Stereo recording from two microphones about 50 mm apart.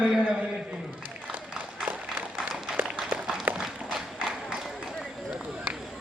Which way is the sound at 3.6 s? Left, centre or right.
Centre.